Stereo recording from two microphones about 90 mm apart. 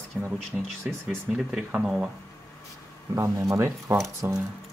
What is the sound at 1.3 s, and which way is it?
Speech, 5° right (ahead or behind).